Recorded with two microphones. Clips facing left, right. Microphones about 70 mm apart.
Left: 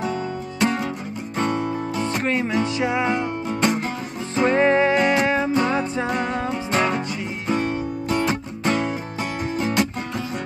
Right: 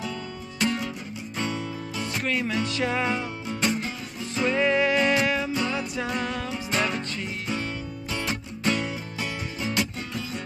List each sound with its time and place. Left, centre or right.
0.0 s music: left
2.2 s music: left
3.4 s music: left
7.4 s music: left